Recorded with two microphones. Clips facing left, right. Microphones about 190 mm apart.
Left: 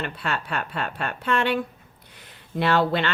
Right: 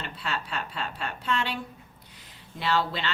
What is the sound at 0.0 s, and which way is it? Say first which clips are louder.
A woman's voice: left 5 dB; 60° left (ahead or behind).